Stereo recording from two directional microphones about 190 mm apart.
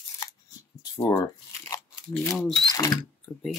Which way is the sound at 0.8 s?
20° left (ahead or behind).